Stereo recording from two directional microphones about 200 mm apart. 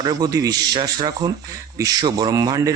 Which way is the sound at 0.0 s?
20° right (ahead or behind).